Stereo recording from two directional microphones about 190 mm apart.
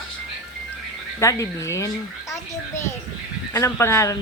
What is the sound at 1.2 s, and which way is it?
A child's voice, 15° left (ahead or behind).